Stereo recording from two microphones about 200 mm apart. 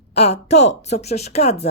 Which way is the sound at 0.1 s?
30° left (ahead or behind).